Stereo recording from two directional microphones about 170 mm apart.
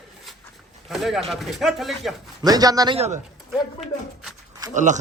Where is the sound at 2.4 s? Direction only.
20° right (ahead or behind).